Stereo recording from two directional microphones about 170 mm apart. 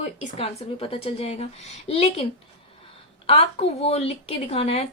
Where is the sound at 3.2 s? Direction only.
35° left (ahead or behind).